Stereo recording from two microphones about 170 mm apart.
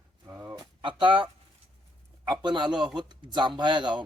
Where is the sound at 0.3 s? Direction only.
15° right (ahead or behind).